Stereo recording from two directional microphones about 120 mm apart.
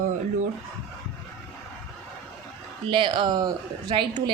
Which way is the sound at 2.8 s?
45° right (ahead or behind).